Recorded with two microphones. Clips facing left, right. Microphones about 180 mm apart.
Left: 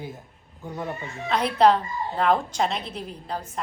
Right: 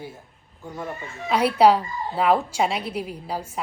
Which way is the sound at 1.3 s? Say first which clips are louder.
Right 2 dB; 10° right (ahead or behind).